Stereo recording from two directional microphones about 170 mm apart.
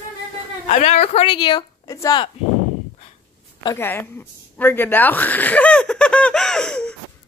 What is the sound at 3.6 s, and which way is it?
A woman's voice, 15° left (ahead or behind).